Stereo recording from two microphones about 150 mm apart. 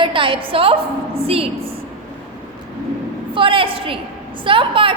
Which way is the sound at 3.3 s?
35° right (ahead or behind).